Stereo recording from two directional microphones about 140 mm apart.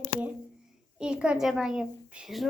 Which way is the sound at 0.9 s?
5° right (ahead or behind).